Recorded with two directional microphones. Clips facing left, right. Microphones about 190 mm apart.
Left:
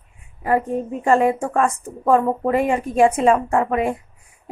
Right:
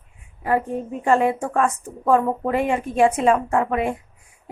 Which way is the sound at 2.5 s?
40° left (ahead or behind).